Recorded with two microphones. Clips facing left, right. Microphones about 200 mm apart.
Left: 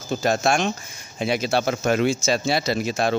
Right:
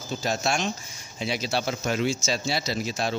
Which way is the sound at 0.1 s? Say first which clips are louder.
Left 6 dB; 55° left (ahead or behind).